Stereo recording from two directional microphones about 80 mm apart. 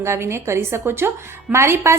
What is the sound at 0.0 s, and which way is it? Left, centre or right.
A woman's voice, right.